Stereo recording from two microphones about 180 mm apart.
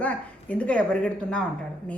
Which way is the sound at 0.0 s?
10° left (ahead or behind).